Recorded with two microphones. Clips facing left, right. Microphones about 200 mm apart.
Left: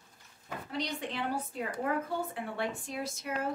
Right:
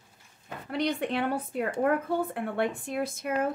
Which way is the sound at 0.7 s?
60° right (ahead or behind).